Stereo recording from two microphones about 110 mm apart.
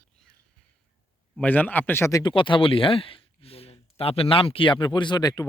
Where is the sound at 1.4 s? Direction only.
15° left (ahead or behind).